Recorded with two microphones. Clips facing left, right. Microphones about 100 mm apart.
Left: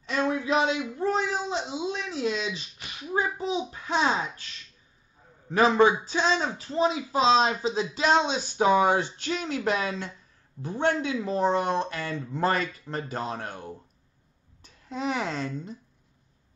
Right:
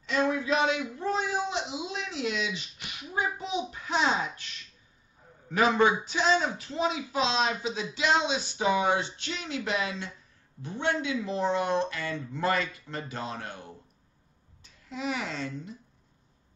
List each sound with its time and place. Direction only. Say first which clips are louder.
0.1 s a sound: left 1 dB; 30° left (ahead or behind)
5.5 s speech: left 3 dB; 35° left (ahead or behind)
14.9 s speech: left 4 dB; 40° left (ahead or behind)